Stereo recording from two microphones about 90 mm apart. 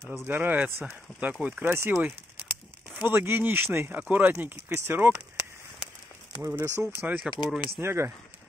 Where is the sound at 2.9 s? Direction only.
15° right (ahead or behind).